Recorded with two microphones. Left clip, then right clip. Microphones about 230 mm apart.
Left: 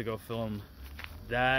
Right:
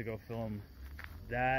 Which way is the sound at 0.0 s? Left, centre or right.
Centre.